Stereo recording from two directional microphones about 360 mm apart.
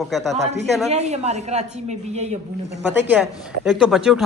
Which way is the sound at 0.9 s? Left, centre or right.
Centre.